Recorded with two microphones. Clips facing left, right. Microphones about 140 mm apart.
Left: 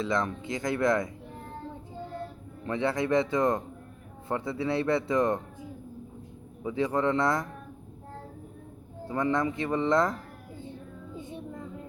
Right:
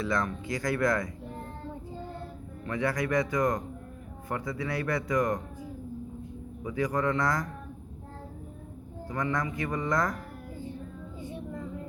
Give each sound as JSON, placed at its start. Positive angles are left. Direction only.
{"t": 0.0, "sound": "speech", "side_deg": 20}
{"t": 2.6, "sound": "speech", "side_deg": 25}
{"t": 6.6, "sound": "speech", "side_deg": 25}
{"t": 9.0, "sound": "speech", "side_deg": 25}